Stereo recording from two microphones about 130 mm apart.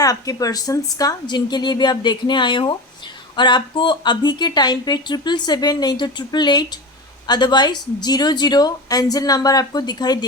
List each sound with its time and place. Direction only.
0.0 s speech: 25° left (ahead or behind)